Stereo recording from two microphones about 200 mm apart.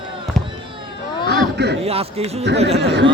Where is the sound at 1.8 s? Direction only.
30° right (ahead or behind).